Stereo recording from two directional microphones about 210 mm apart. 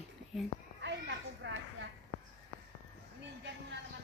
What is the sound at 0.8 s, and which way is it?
Children playing, 60° right (ahead or behind).